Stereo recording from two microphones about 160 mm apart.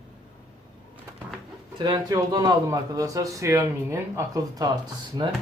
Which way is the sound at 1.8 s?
25° right (ahead or behind).